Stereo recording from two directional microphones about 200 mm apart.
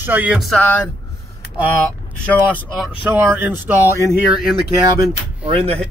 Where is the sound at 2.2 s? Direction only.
5° left (ahead or behind).